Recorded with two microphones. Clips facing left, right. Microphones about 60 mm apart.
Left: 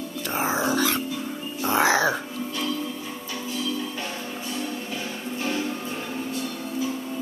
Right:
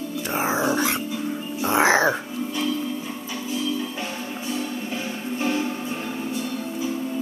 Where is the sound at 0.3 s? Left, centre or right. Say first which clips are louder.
Right 1 dB; centre.